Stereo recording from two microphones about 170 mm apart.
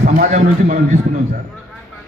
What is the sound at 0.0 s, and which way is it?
Speech, 45° right (ahead or behind).